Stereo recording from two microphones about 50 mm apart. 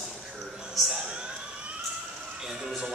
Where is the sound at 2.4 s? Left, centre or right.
Centre.